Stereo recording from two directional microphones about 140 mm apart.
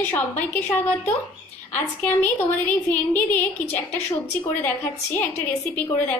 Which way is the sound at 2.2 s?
10° left (ahead or behind).